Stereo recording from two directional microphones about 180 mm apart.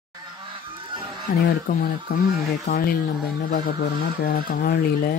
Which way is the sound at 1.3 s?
60° left (ahead or behind).